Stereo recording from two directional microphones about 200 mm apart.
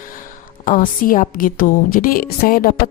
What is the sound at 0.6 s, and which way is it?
A woman's voice, 45° left (ahead or behind).